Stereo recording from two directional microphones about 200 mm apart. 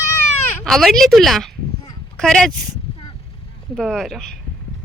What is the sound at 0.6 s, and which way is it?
Speech, centre (ahead or behind).